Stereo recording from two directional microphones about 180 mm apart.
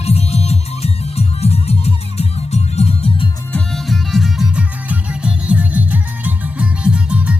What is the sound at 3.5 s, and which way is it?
Music, centre (ahead or behind).